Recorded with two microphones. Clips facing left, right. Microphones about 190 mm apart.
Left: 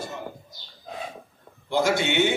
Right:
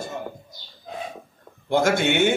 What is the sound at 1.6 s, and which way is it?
Speech, 50° right (ahead or behind).